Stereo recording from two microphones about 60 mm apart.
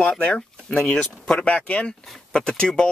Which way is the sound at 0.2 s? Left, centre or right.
Centre.